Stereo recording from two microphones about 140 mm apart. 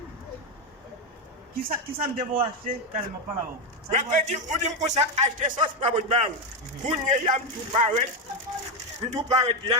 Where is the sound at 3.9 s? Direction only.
60° right (ahead or behind).